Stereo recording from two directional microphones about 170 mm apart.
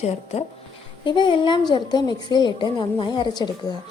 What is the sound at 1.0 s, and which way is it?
A woman's voice, 30° left (ahead or behind).